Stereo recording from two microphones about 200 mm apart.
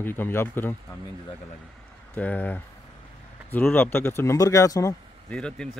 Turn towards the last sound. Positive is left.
turn(degrees=5)  # may be behind; listen again after turning